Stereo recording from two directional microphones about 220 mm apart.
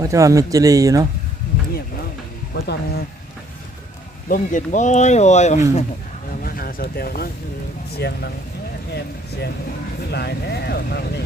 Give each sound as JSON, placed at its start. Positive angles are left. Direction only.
{"t": 0.0, "sound": "speech", "side_deg": -15}
{"t": 2.6, "sound": "speech", "side_deg": 45}
{"t": 4.3, "sound": "speech", "side_deg": 35}